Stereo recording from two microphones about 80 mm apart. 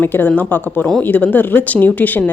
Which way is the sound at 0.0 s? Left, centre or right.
Left.